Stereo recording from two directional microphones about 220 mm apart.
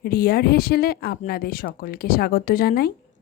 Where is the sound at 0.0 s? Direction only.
45° left (ahead or behind).